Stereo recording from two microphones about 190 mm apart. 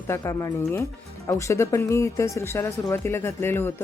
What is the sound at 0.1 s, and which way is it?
Speech, 15° left (ahead or behind).